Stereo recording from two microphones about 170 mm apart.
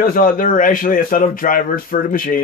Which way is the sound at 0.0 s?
55° left (ahead or behind).